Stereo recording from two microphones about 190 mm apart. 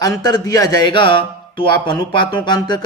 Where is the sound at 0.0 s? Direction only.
20° left (ahead or behind).